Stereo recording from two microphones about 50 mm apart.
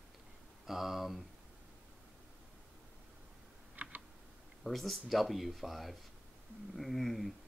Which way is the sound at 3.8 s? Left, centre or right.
Right.